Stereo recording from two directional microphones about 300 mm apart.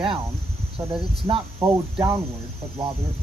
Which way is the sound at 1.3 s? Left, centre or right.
Centre.